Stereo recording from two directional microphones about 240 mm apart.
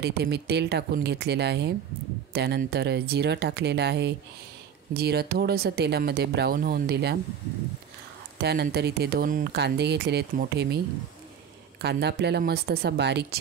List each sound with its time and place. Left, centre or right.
0.0 s speech: right
8.4 s speech: right
11.8 s speech: right